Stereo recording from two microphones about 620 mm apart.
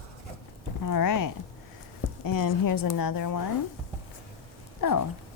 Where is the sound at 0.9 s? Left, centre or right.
Left.